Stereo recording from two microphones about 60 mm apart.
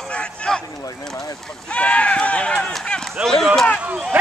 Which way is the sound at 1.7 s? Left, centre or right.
Left.